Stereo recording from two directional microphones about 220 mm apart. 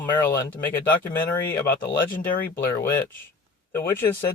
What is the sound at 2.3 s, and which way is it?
Speech, 40° left (ahead or behind).